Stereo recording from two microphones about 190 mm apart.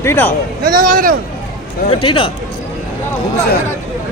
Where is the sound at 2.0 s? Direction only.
25° left (ahead or behind).